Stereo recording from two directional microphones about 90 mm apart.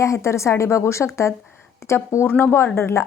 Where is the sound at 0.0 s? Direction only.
30° left (ahead or behind).